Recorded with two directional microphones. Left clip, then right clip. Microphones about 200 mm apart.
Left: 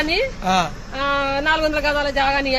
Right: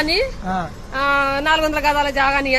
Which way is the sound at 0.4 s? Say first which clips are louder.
Left 5 dB; 15° left (ahead or behind).